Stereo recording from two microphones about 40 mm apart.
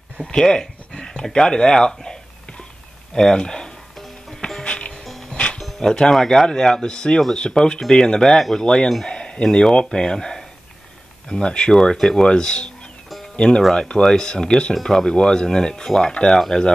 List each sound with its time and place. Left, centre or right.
0.2 s speech: centre
3.2 s speech: centre
4.6 s music: left
5.6 s speech: centre
13.4 s speech: centre
16.3 s speech: centre